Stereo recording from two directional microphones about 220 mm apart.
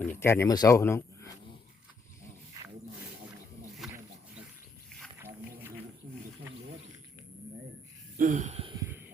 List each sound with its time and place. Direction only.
0.0 s speech: 10° left (ahead or behind)
5.2 s wild animals: 10° right (ahead or behind)
8.2 s wheeze: 35° right (ahead or behind)
8.7 s music: 10° right (ahead or behind)